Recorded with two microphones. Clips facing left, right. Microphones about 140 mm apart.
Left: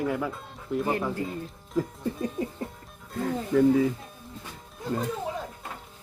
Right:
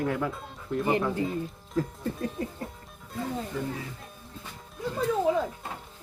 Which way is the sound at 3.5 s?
90° left.